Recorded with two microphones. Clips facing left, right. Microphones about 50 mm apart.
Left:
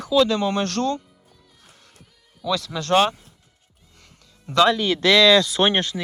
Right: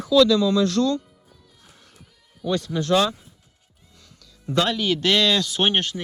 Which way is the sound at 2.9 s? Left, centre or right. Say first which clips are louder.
Left 2 dB; left.